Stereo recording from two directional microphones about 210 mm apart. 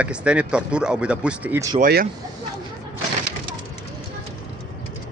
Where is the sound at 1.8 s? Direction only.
45° right (ahead or behind).